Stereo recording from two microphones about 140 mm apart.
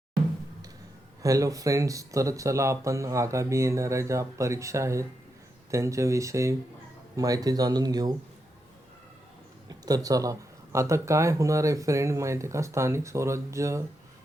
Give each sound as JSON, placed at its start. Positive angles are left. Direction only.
{"t": 1.2, "sound": "speech", "side_deg": -25}
{"t": 9.6, "sound": "speech", "side_deg": -25}